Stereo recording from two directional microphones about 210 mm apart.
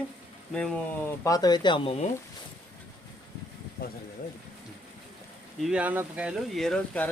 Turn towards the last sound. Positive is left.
turn(degrees=0)  # may be behind; listen again after turning